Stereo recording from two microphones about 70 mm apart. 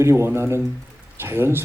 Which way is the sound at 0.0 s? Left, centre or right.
Right.